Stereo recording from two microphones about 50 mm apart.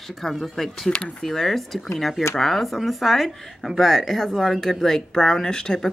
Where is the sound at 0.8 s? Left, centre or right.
Left.